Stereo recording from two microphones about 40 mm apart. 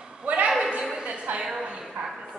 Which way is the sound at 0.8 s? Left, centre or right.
Right.